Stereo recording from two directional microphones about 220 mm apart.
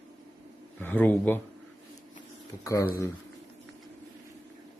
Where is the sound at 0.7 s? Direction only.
5° left (ahead or behind).